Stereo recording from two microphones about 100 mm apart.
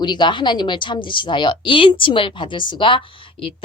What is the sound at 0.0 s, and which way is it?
A woman's voice, 50° left (ahead or behind).